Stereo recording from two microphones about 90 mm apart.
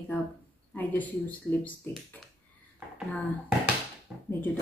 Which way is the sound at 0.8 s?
20° left (ahead or behind).